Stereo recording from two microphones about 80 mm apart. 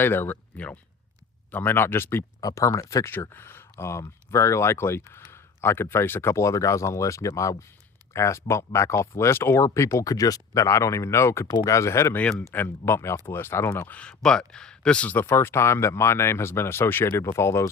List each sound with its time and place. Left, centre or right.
0.0 s speech: left
2.4 s speech: left
14.0 s speech: centre
15.3 s speech: left